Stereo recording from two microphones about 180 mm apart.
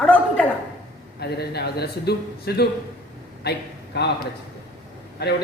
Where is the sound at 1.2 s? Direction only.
65° left (ahead or behind).